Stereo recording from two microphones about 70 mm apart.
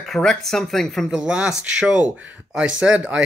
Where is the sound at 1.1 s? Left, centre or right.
Centre.